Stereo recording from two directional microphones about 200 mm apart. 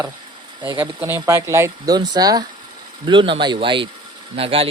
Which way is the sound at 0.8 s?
10° right (ahead or behind).